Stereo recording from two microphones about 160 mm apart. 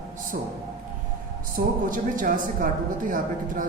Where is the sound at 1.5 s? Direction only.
60° right (ahead or behind).